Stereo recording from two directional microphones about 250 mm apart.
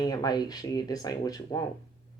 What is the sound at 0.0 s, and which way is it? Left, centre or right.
Speech, centre.